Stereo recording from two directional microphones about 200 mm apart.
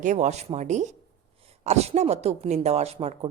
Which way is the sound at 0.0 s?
35° right (ahead or behind).